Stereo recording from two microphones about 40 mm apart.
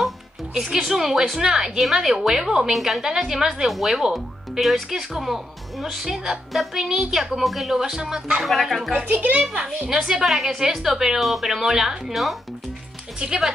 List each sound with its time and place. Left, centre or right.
0.6 s speech: centre
7.8 s speech: centre
8.5 s speech: centre
9.0 s a child's voice: right
9.8 s speech: centre
10.9 s speech: centre
11.1 s speech: centre
12.1 s speech: centre
13.2 s speech: centre